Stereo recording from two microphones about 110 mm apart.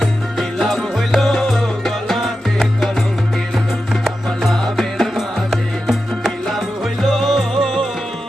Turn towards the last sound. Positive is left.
turn(degrees=5)  # may be behind; listen again after turning